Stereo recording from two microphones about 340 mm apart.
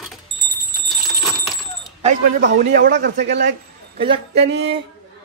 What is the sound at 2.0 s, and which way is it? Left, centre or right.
A man's voice, right.